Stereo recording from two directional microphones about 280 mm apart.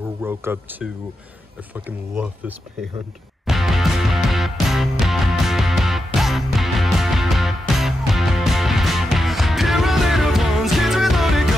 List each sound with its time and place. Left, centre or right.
0.2 s speech: centre
1.9 s speech: centre
3.4 s music: centre